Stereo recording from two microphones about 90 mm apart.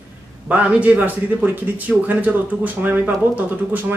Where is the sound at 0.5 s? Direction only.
15° right (ahead or behind).